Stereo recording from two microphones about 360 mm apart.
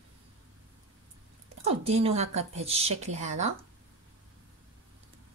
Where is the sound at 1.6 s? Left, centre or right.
Centre.